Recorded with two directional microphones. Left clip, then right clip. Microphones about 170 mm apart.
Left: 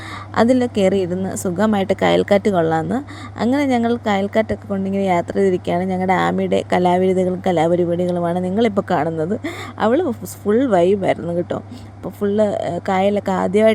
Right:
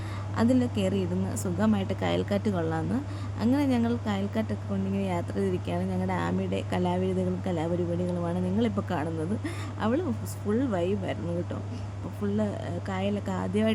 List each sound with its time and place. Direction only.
0.3 s a woman's voice: 40° left (ahead or behind)